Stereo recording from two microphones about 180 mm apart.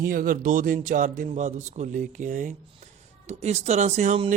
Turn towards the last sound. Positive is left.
turn(degrees=-40)  # may be behind; listen again after turning